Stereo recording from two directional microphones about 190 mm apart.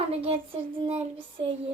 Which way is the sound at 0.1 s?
30° right (ahead or behind).